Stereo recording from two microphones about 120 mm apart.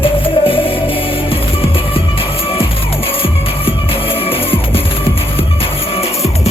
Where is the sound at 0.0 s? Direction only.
50° left (ahead or behind).